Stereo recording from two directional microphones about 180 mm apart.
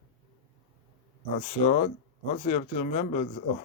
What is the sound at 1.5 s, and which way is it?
Speech, 40° left (ahead or behind).